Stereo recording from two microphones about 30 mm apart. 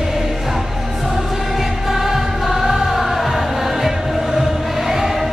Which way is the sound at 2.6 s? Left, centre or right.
Centre.